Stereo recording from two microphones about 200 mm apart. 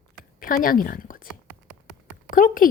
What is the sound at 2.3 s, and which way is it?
Speech, 45° left (ahead or behind).